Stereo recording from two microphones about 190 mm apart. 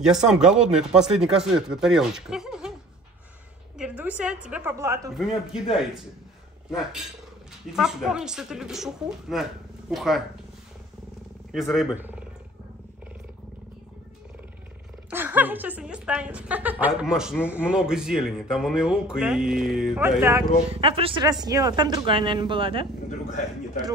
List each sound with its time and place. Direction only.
0.0 s a man's voice: 5° right (ahead or behind)
3.7 s a man's voice: 5° right (ahead or behind)
5.1 s a man's voice: centre (ahead or behind)
7.7 s a man's voice: 5° right (ahead or behind)
11.5 s speech: centre (ahead or behind)
15.0 s a woman's voice: 10° right (ahead or behind)
20.7 s speech: 30° right (ahead or behind)